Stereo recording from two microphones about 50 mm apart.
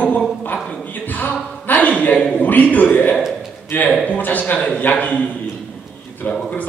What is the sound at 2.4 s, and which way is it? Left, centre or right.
A man's voice, left.